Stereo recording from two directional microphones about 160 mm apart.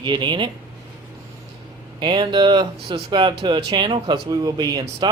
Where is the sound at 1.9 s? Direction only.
30° right (ahead or behind).